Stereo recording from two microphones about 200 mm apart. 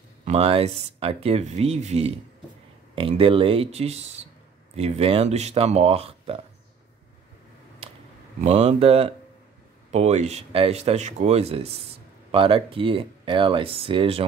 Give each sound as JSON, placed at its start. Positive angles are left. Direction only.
{"t": 0.2, "sound": "speech", "side_deg": -30}
{"t": 7.8, "sound": "a sound", "side_deg": -30}
{"t": 8.5, "sound": "speech", "side_deg": -30}